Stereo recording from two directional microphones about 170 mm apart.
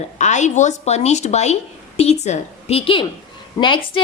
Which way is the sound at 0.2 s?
45° left (ahead or behind).